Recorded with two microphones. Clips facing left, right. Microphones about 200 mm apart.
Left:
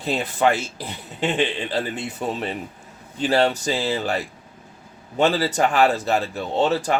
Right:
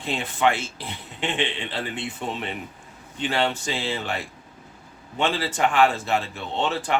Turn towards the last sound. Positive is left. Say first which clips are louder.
# left 5 dB
turn(degrees=40)  # may be behind; listen again after turning